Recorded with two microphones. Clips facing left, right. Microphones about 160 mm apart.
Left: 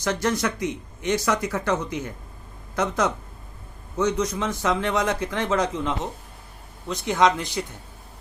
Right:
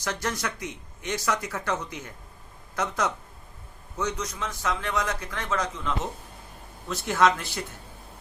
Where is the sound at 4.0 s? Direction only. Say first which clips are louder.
Left 7 dB; 25° left (ahead or behind).